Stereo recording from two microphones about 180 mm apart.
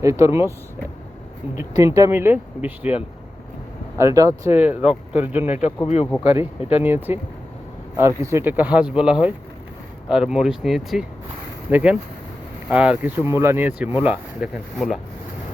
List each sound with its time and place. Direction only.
0.0 s speech: 15° right (ahead or behind)
1.5 s speech: 15° right (ahead or behind)
5.8 s speech: 35° left (ahead or behind)
6.3 s speech: 10° right (ahead or behind)